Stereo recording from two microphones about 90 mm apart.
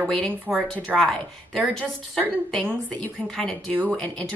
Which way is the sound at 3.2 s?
5° left (ahead or behind).